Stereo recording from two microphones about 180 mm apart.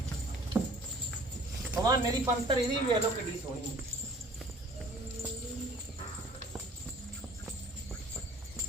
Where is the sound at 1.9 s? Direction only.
20° right (ahead or behind).